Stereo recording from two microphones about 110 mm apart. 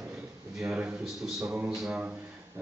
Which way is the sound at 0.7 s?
10° right (ahead or behind).